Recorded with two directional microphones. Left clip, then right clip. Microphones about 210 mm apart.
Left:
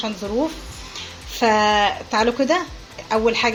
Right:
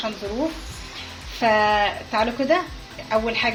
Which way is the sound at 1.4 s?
50° left (ahead or behind).